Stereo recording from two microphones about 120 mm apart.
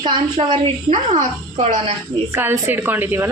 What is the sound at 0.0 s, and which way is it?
Speech, 40° right (ahead or behind).